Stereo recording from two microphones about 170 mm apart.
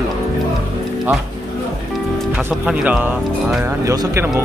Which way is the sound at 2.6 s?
5° right (ahead or behind).